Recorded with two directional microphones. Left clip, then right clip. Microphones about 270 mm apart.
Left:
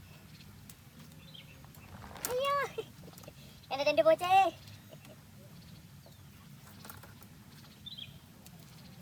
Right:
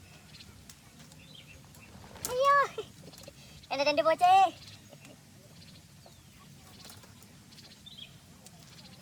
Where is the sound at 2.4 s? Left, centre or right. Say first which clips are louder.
Right 8 dB; centre.